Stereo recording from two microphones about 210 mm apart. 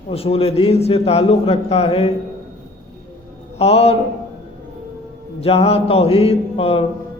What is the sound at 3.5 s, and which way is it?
Speech, 30° left (ahead or behind).